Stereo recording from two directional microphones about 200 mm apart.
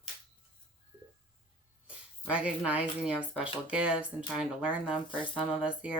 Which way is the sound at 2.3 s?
5° right (ahead or behind).